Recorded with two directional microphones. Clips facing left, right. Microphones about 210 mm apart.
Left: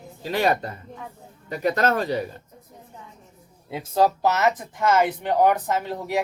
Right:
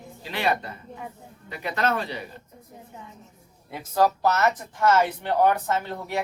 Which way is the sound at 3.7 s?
25° left (ahead or behind).